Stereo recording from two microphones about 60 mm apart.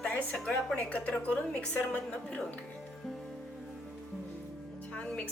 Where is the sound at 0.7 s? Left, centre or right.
Left.